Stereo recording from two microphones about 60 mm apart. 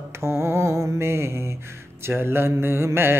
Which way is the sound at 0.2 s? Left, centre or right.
Right.